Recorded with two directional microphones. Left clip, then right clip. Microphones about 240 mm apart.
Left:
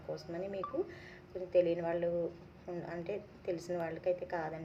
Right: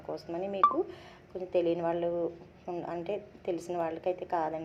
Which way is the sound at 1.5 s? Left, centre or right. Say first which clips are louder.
Right 2 dB; centre.